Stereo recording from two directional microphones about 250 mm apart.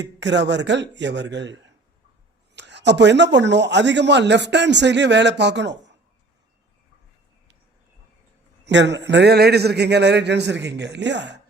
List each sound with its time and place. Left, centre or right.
0.2 s speech: right
8.6 s speech: right